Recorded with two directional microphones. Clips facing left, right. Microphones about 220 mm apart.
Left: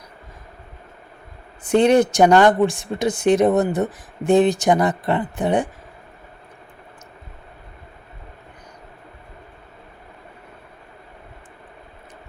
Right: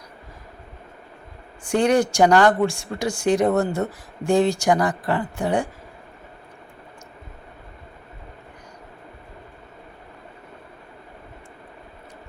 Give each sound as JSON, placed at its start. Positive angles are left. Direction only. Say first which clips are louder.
{"t": 1.6, "sound": "speech", "louder": "left 4 dB", "side_deg": 20}